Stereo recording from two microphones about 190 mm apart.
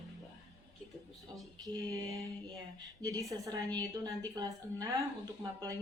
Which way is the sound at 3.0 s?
20° right (ahead or behind).